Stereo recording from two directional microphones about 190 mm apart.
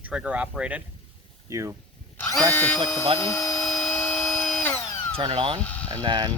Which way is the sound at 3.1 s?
15° left (ahead or behind).